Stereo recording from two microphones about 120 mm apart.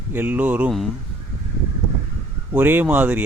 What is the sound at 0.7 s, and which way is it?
Speech, centre (ahead or behind).